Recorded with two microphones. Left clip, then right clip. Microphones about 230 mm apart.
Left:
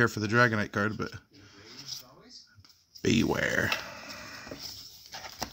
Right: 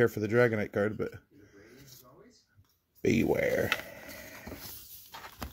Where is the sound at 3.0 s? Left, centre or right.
Centre.